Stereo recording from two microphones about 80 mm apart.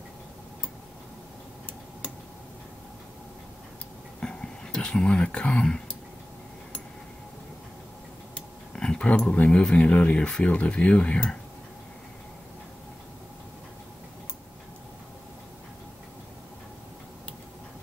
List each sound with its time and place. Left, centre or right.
4.2 s a sound: centre
8.4 s dog: centre
9.3 s speech: centre